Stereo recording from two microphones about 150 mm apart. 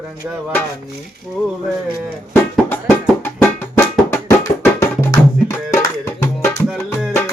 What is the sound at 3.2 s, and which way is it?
Music, 15° left (ahead or behind).